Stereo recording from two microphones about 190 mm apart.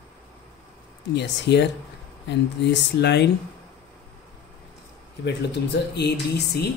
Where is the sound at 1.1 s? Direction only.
65° left (ahead or behind).